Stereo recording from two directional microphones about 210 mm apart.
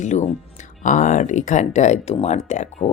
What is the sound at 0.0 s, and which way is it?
Speech, 35° left (ahead or behind).